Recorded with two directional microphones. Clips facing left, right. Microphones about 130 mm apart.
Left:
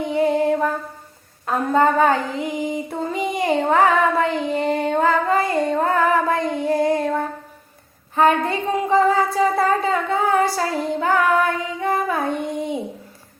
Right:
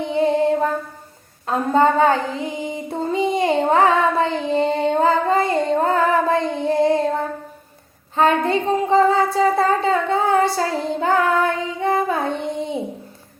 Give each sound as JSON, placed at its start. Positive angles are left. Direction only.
{"t": 0.0, "sound": "music", "side_deg": -25}
{"t": 1.5, "sound": "female singing", "side_deg": -25}
{"t": 8.1, "sound": "a sound", "side_deg": -25}